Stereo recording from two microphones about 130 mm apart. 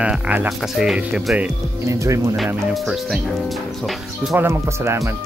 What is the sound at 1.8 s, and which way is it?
Speech, 25° right (ahead or behind).